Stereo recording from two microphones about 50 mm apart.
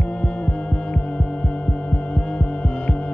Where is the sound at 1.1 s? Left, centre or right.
Centre.